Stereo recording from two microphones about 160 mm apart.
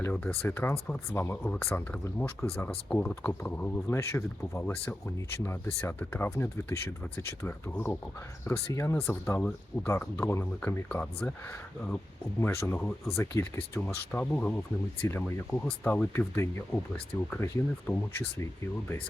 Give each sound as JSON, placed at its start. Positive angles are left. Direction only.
{"t": 0.0, "sound": "speech", "side_deg": 10}
{"t": 12.4, "sound": "speech", "side_deg": 15}